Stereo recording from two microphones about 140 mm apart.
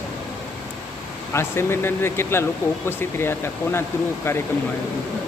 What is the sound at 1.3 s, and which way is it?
Speech, 20° left (ahead or behind).